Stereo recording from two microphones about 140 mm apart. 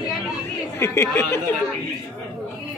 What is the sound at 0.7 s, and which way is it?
Speech, 20° left (ahead or behind).